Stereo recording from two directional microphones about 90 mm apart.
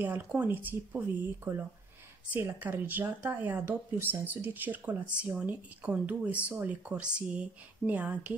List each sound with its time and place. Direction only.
0.0 s speech: 20° right (ahead or behind)